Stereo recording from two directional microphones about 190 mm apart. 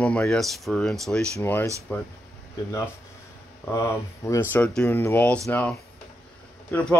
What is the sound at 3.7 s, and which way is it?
Speech, 15° left (ahead or behind).